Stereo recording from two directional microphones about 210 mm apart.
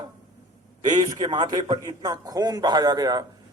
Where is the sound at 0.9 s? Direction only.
20° right (ahead or behind).